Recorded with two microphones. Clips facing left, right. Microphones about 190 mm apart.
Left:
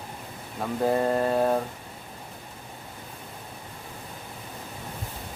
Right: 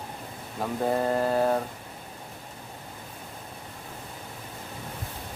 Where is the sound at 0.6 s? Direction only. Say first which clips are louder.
Left 2 dB; centre (ahead or behind).